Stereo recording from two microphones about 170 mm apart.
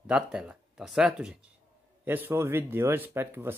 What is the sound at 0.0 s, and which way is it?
Speech, 5° right (ahead or behind).